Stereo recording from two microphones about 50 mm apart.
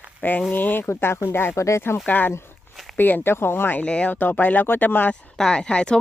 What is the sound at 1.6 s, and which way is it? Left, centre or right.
Speech, left.